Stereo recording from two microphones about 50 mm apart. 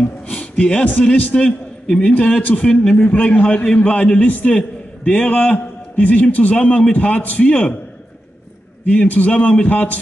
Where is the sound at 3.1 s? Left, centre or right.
Left.